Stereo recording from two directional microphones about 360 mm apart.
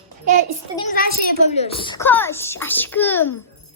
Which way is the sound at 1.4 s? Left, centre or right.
Centre.